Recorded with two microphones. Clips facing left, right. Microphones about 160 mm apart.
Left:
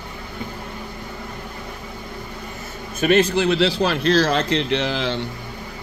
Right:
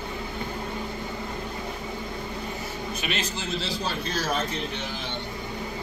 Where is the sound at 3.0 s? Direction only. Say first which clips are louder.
Left 18 dB; 55° left (ahead or behind); by 5.2 s 90° left.